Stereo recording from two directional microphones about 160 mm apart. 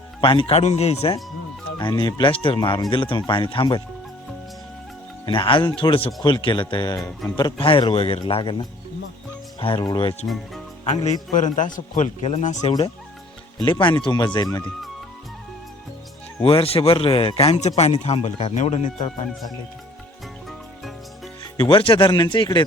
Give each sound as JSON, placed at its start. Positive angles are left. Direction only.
{"t": 0.2, "sound": "speech", "side_deg": 35}
{"t": 1.8, "sound": "speech", "side_deg": 25}
{"t": 5.2, "sound": "speech", "side_deg": 30}
{"t": 10.2, "sound": "speech", "side_deg": 0}
{"t": 11.0, "sound": "a man's voice", "side_deg": 50}
{"t": 13.6, "sound": "speech", "side_deg": 30}
{"t": 16.4, "sound": "speech", "side_deg": 35}
{"t": 21.6, "sound": "speech", "side_deg": 35}